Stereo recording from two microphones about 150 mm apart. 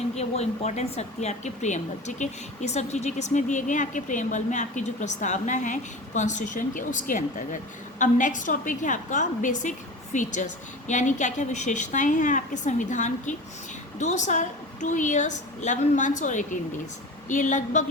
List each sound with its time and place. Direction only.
0.1 s a woman's voice: 45° left (ahead or behind)